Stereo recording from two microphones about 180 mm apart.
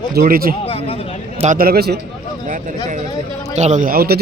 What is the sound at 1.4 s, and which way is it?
Speech, 45° right (ahead or behind).